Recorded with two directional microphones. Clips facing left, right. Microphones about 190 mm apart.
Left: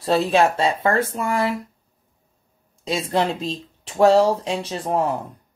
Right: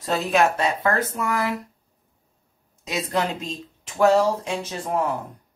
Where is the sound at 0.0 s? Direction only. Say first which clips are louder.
Left 3 dB; 30° left (ahead or behind).